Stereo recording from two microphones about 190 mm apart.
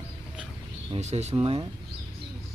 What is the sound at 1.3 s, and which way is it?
Speech, 25° right (ahead or behind).